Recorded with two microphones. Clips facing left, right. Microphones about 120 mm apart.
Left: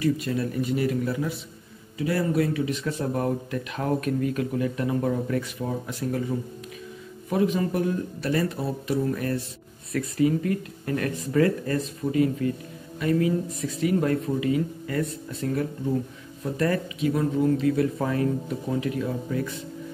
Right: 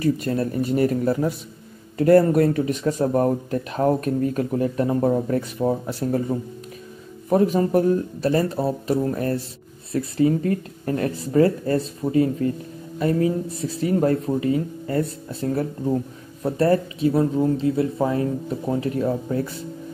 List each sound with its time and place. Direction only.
0.0 s speech: 45° right (ahead or behind)